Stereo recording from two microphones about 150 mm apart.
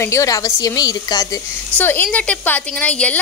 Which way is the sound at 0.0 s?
20° left (ahead or behind).